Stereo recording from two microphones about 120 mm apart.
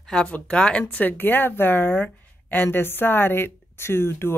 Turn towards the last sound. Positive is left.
turn(degrees=20)  # may be behind; listen again after turning